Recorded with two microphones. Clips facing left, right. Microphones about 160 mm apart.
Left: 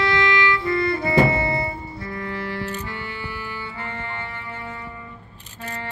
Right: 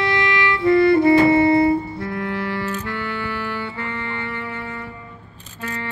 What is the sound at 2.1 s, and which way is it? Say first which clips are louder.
Music: right 4 dB; 70° right (ahead or behind).